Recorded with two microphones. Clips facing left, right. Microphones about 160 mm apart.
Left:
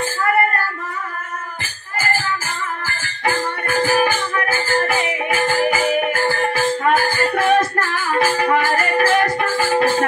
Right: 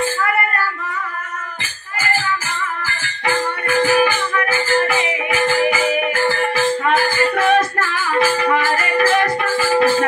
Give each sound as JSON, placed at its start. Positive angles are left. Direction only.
{"t": 2.9, "sound": "music", "side_deg": 40}